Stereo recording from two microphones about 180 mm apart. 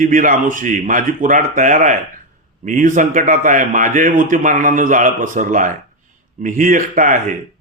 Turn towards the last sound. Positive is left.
turn(degrees=-50)  # may be behind; listen again after turning